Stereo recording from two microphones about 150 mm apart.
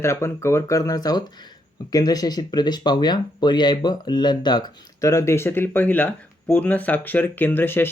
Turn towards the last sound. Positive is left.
turn(degrees=15)  # may be behind; listen again after turning